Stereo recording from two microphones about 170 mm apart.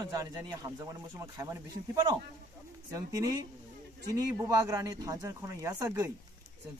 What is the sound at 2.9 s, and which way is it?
Speech, 20° right (ahead or behind).